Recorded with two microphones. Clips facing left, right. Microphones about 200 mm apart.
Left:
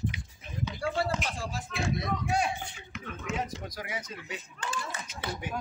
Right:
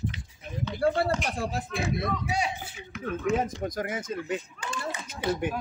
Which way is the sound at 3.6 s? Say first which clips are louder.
Right 8 dB; 50° right (ahead or behind).